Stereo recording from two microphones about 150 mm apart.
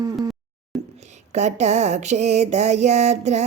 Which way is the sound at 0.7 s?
Centre (ahead or behind).